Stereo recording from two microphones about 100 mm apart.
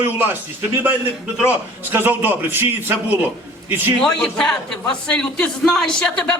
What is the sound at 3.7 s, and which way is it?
Speech, 20° right (ahead or behind).